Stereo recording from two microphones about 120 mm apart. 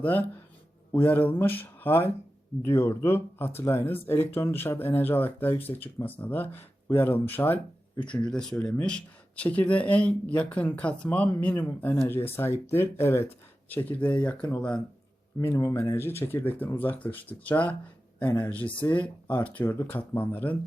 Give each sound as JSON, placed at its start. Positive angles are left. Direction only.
{"t": 0.0, "sound": "speech", "side_deg": 15}
{"t": 15.4, "sound": "speech", "side_deg": 25}